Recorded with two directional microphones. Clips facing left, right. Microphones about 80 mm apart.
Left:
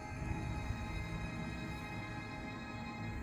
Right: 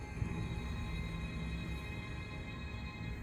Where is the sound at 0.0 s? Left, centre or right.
Centre.